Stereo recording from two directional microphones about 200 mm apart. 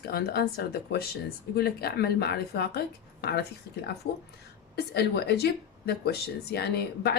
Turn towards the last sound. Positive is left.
turn(degrees=55)  # may be behind; listen again after turning